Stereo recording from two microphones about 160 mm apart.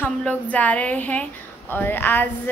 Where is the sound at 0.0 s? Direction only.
10° left (ahead or behind).